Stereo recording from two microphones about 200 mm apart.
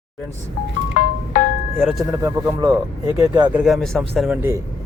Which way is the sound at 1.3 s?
45° left (ahead or behind).